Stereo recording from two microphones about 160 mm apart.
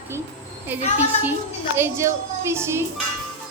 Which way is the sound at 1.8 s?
15° right (ahead or behind).